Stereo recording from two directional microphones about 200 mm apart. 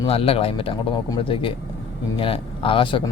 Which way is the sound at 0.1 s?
30° left (ahead or behind).